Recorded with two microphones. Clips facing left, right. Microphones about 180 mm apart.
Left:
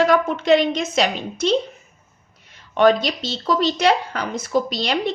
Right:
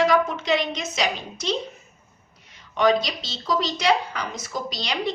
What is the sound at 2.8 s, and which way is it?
A woman's voice, 55° left (ahead or behind).